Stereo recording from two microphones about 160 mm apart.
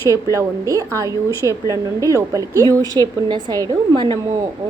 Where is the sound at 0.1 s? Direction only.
20° right (ahead or behind).